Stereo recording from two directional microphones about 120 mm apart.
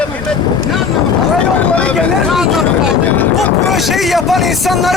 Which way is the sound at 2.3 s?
5° right (ahead or behind).